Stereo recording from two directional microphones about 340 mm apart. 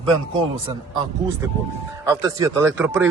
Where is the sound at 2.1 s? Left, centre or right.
Centre.